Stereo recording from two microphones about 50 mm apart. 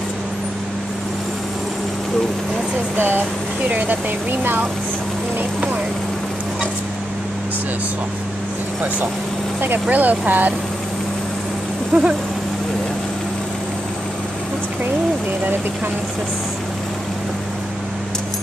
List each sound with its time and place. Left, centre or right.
3.0 s speech: right
3.6 s speech: right
9.8 s speech: right
11.9 s a sound: right